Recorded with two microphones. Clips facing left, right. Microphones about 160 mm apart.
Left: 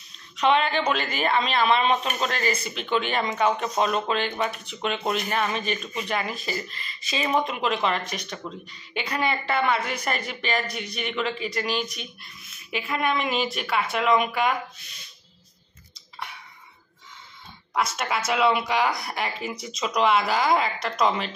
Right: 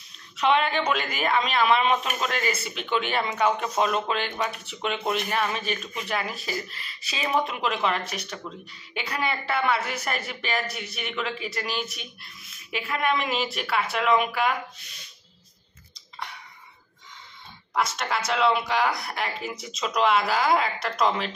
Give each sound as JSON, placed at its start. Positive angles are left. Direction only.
{"t": 0.4, "sound": "speech", "side_deg": -5}
{"t": 17.7, "sound": "speech", "side_deg": 5}